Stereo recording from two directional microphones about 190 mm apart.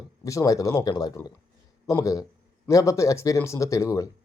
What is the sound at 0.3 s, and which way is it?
Speech, 15° left (ahead or behind).